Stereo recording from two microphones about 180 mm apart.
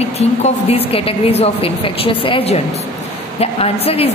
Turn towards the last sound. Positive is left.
turn(degrees=35)  # may be behind; listen again after turning